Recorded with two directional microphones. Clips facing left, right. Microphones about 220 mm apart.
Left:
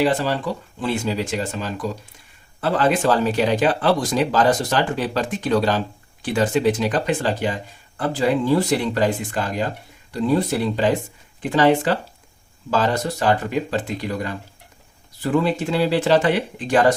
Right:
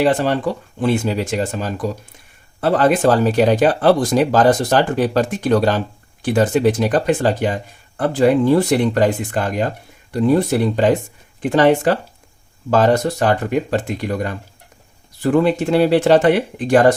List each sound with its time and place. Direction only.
0.0 s speech: 50° right (ahead or behind)